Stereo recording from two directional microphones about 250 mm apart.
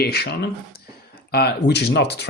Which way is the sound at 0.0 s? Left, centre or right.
Left.